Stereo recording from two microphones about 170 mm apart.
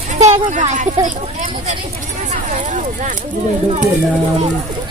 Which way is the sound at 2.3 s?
45° right (ahead or behind).